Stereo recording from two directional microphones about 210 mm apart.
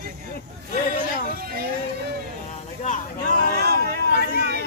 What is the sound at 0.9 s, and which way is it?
Music, 40° left (ahead or behind).